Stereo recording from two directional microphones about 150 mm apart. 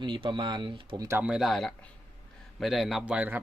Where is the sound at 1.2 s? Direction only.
5° right (ahead or behind).